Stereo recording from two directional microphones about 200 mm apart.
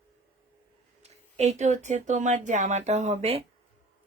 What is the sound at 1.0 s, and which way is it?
Speech, 35° right (ahead or behind).